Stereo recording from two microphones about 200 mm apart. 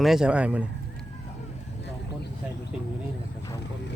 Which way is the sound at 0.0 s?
Centre (ahead or behind).